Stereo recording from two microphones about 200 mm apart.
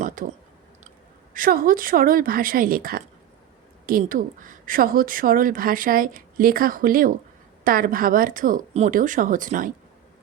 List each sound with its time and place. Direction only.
0.2 s speech: 40° right (ahead or behind)